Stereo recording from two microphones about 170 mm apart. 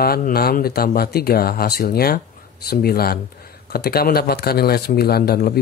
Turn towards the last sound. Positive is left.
turn(degrees=65)  # may be behind; listen again after turning